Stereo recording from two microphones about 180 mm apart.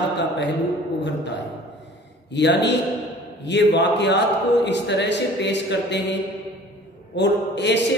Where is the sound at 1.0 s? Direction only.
75° left (ahead or behind).